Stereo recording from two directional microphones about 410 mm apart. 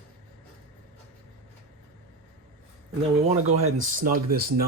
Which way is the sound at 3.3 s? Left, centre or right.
Centre.